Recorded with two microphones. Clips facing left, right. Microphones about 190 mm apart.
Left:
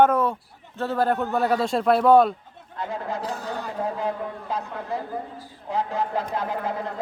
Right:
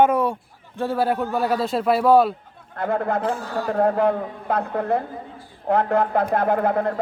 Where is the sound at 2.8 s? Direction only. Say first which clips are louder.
Right 7 dB; 55° right (ahead or behind).